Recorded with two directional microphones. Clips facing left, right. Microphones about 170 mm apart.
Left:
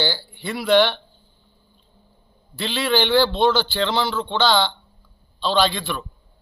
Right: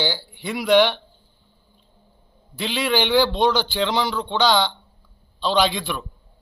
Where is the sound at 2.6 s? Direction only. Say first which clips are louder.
Left 1 dB; 10° right (ahead or behind).